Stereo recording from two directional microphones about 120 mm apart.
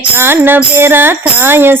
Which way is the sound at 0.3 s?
20° right (ahead or behind).